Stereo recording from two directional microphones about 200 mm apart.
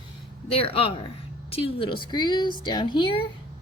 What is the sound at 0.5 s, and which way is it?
Speech, 30° left (ahead or behind).